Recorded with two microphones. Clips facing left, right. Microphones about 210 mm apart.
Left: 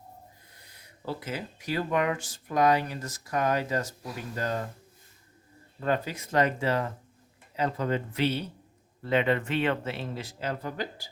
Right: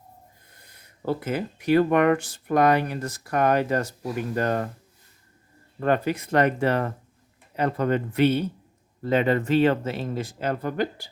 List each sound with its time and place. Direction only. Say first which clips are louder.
0.6 s speech: right 7 dB; 50° right (ahead or behind)
5.8 s speech: right 6 dB; 60° right (ahead or behind)
9.0 s speech: right 4 dB; 40° right (ahead or behind); by 11.1 s 60° right (ahead or behind)